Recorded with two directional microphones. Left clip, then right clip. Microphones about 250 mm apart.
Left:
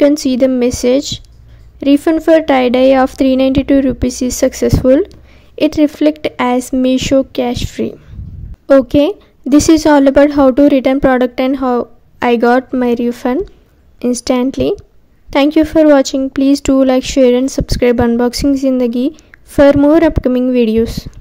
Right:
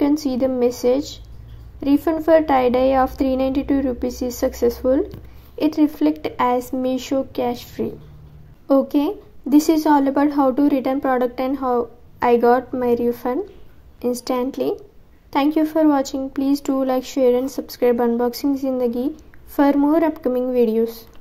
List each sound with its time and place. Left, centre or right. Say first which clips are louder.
0.0 s a woman's voice: left 9 dB; left